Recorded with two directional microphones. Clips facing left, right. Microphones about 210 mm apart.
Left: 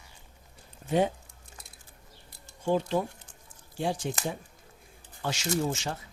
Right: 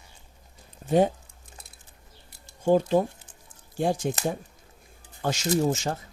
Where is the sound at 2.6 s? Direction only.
45° right (ahead or behind).